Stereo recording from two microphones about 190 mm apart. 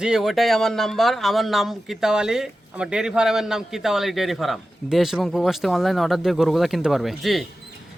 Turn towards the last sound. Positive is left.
turn(degrees=0)  # may be behind; listen again after turning